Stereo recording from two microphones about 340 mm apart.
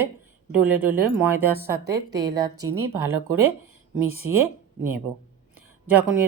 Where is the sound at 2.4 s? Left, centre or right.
Centre.